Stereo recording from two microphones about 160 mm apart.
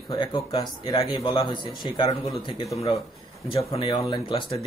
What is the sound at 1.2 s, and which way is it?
Speech, 30° left (ahead or behind).